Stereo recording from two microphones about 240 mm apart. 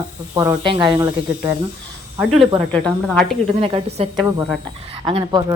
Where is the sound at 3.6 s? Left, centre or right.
Right.